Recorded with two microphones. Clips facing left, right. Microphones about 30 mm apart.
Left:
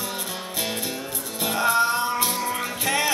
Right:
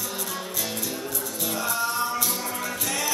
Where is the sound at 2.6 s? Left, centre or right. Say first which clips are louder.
Left 4 dB; left.